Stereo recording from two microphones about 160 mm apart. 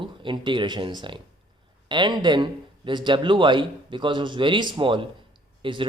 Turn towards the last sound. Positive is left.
turn(degrees=-30)  # may be behind; listen again after turning